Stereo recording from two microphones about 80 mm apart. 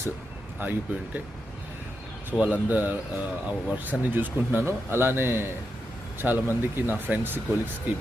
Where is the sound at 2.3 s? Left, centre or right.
Centre.